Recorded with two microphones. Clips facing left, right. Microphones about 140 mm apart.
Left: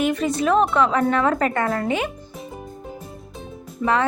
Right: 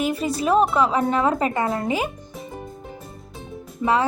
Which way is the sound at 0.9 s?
25° right (ahead or behind).